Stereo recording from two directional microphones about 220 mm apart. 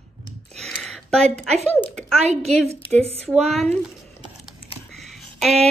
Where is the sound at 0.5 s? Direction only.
Centre (ahead or behind).